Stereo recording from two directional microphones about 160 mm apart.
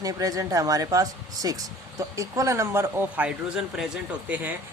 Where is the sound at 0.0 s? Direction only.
20° right (ahead or behind).